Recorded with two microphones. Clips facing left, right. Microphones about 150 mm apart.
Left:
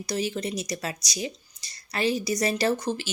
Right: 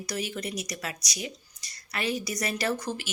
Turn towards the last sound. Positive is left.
turn(degrees=25)  # may be behind; listen again after turning